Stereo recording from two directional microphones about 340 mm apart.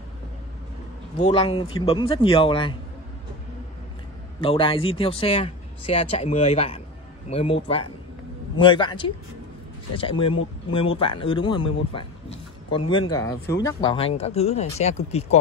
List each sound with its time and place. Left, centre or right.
1.1 s speech: centre
4.4 s speech: centre